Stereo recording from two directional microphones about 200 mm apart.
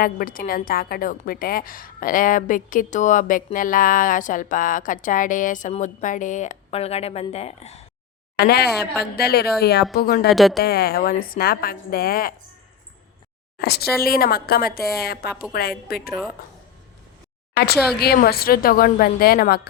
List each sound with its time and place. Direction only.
0.0 s a woman's voice: 45° left (ahead or behind)
8.4 s a woman's voice: 55° left (ahead or behind)
8.7 s speech: centre (ahead or behind)
9.1 s a woman's voice: 50° left (ahead or behind)
10.2 s speech: centre (ahead or behind)
10.6 s a woman's voice: 50° left (ahead or behind)
13.6 s a woman's voice: 55° left (ahead or behind)
18.0 s a woman's voice: 50° left (ahead or behind)